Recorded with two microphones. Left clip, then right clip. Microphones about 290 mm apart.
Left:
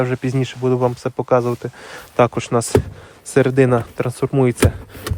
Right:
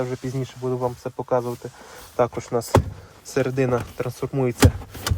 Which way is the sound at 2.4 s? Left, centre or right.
Left.